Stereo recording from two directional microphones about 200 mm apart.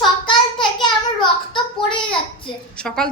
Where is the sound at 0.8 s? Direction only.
25° left (ahead or behind).